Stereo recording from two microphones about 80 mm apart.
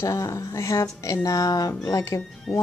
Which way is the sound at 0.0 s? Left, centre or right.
Left.